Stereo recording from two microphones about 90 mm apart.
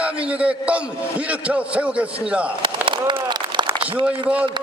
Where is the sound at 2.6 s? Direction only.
65° right (ahead or behind).